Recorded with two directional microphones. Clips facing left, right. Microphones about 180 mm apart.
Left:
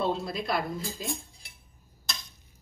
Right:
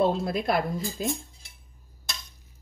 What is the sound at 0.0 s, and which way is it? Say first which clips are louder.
A woman's voice: right 5 dB; 55° right (ahead or behind).